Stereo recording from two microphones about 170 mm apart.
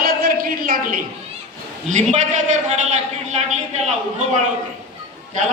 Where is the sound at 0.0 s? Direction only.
60° right (ahead or behind).